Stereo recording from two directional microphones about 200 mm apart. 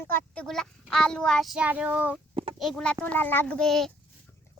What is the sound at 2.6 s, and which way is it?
A child's voice, centre (ahead or behind).